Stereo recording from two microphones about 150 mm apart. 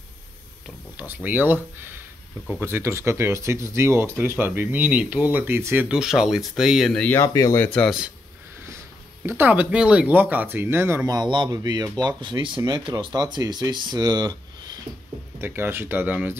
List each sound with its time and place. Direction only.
0.9 s speech: 10° right (ahead or behind); by 7.2 s 5° left (ahead or behind)
7.2 s speech: 20° left (ahead or behind)
9.4 s speech: 10° right (ahead or behind)
11.1 s speech: 30° right (ahead or behind)
15.3 s speech: 15° right (ahead or behind)